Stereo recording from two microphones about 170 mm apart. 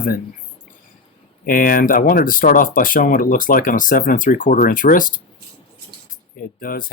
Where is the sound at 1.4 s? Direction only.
55° left (ahead or behind).